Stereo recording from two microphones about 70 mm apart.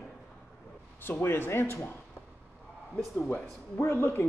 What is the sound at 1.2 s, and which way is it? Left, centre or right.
Speech, left.